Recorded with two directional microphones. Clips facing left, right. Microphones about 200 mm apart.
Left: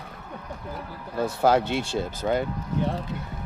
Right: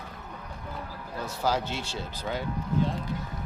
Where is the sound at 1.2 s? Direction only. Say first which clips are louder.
Left 8 dB; 60° left (ahead or behind).